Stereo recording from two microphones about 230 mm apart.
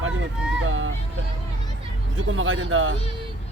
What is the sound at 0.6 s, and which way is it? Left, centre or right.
Speech, right.